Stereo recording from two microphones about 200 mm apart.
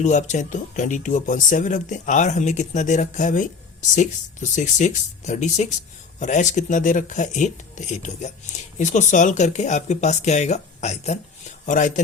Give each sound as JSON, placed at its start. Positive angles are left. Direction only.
{"t": 0.0, "sound": "speech", "side_deg": 35}